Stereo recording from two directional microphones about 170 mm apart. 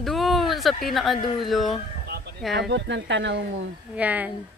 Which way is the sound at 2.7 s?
90° right.